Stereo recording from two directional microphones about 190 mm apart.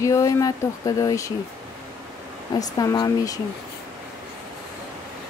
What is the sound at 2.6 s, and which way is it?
Speech, 20° left (ahead or behind).